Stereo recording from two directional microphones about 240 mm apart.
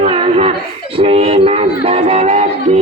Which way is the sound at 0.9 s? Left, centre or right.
Right.